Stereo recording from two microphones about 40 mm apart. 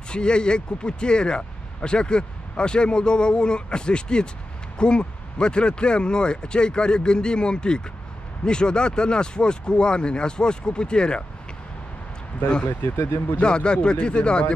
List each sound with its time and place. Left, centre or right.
0.1 s speech: left
12.8 s speech: left
13.4 s speech: left